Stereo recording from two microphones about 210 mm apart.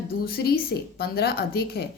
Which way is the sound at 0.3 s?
45° left (ahead or behind).